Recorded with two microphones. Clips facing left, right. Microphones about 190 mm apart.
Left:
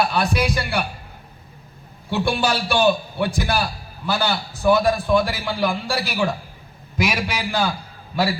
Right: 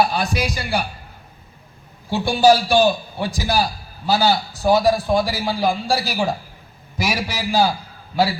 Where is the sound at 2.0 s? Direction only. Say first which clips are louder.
Right 6 dB; 60° left (ahead or behind).